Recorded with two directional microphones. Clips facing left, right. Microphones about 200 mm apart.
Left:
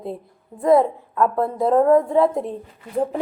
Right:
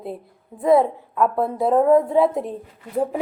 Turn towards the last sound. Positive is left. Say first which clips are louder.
# even
turn(degrees=-5)  # may be behind; listen again after turning